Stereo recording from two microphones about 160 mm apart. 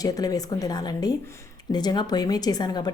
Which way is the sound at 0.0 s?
25° left (ahead or behind).